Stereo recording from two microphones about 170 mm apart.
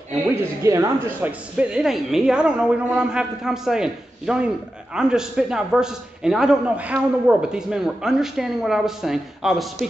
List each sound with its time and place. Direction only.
0.6 s speech: 15° right (ahead or behind)
1.6 s a man's voice: 5° right (ahead or behind)